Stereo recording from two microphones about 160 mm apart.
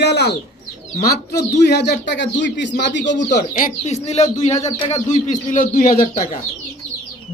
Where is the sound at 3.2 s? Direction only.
50° left (ahead or behind).